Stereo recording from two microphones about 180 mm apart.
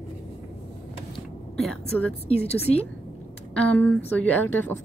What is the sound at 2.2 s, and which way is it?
Speech, 35° left (ahead or behind).